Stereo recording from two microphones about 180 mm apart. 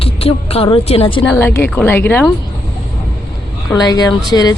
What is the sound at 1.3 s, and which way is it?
Speech, 15° left (ahead or behind).